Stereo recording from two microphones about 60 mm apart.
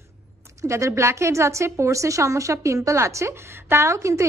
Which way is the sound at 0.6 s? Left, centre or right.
Right.